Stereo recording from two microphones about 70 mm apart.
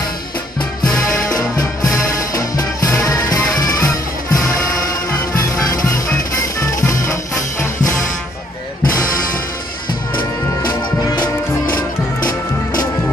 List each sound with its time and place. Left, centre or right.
1.8 s music: left